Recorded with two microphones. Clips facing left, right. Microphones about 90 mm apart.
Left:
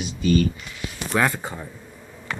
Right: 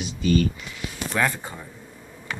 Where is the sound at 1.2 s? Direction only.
25° left (ahead or behind).